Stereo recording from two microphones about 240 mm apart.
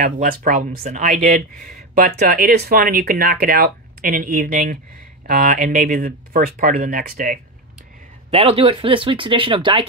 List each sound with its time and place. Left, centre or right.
0.0 s speech: right
8.3 s speech: right